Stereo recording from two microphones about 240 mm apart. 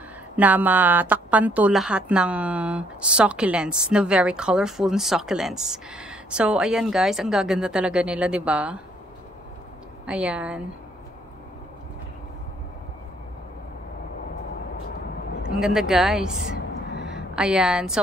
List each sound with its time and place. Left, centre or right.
0.4 s a woman's voice: centre
10.0 s a woman's voice: centre
15.6 s a woman's voice: centre
16.5 s a sound: left
17.4 s a woman's voice: centre